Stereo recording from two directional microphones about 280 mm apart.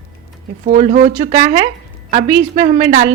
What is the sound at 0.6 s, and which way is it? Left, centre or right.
Speech, right.